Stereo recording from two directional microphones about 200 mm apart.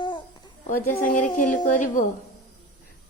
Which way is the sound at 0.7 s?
45° left (ahead or behind).